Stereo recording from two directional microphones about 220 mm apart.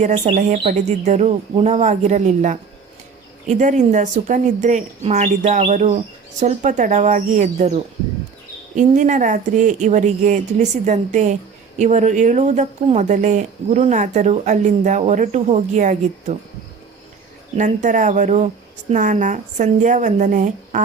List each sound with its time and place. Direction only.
0.0 s speech: 30° right (ahead or behind)
8.7 s speech: 35° right (ahead or behind)
17.6 s speech: 35° right (ahead or behind)